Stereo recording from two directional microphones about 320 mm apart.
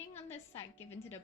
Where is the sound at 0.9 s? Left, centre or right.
Centre.